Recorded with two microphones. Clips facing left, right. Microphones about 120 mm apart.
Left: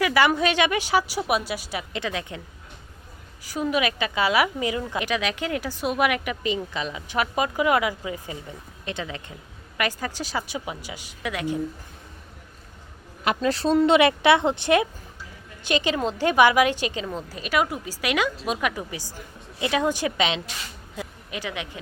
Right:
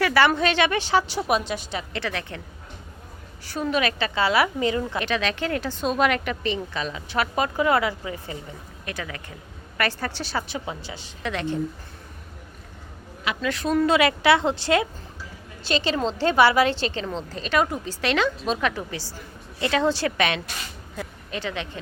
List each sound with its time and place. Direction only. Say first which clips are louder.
0.0 s a woman's voice: right 1 dB; 15° left (ahead or behind)
3.4 s a woman's voice: even; 10° left (ahead or behind)
13.2 s a woman's voice: left 3 dB; 35° left (ahead or behind); by 21.8 s 10° left (ahead or behind)